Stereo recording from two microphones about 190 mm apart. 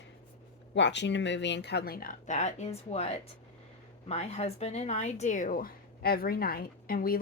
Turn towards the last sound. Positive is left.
turn(degrees=50)  # may be behind; listen again after turning